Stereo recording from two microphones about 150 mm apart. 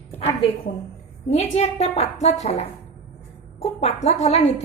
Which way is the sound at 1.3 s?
45° left (ahead or behind).